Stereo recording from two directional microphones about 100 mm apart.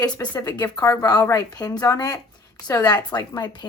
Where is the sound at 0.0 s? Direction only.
40° left (ahead or behind).